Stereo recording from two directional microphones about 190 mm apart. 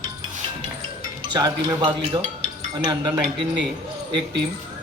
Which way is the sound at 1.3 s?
25° right (ahead or behind).